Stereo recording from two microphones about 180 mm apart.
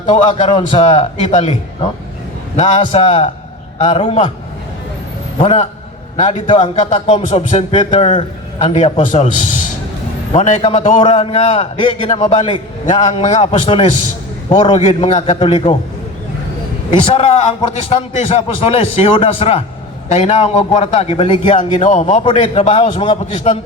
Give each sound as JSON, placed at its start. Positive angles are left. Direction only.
{"t": 0.0, "sound": "a man's voice", "side_deg": 40}
{"t": 5.4, "sound": "a man's voice", "side_deg": 35}
{"t": 16.9, "sound": "a man's voice", "side_deg": 35}